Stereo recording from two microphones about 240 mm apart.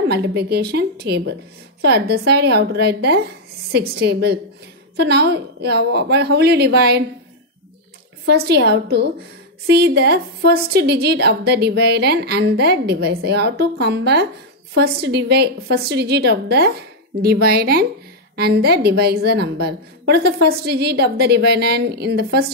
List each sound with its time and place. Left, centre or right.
0.1 s a woman's voice: right
8.3 s a woman's voice: right